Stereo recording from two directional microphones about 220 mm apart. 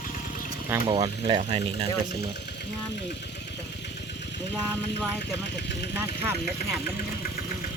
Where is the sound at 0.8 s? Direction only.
25° right (ahead or behind).